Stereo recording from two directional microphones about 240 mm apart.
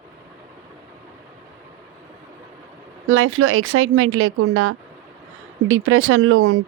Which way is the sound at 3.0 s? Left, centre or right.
Right.